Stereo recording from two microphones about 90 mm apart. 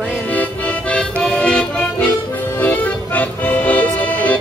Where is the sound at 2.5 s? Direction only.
20° left (ahead or behind).